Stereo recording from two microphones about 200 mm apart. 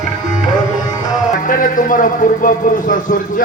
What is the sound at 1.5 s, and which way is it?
A man's voice, 40° left (ahead or behind).